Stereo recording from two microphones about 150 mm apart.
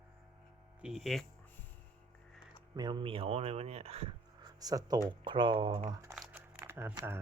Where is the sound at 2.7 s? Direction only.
30° right (ahead or behind).